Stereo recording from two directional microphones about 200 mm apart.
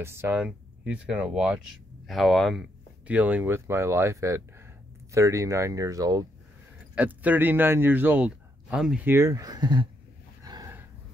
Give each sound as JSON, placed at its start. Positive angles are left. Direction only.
{"t": 0.0, "sound": "a man's voice", "side_deg": -10}
{"t": 10.4, "sound": "gasp", "side_deg": -20}